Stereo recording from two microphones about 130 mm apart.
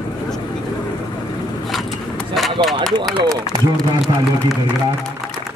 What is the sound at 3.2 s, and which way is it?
Speech, 25° right (ahead or behind).